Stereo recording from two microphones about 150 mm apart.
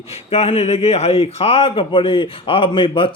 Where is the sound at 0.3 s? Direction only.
45° left (ahead or behind).